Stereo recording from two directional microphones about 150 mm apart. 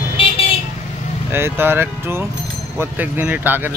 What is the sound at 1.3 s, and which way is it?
Speech, 15° right (ahead or behind).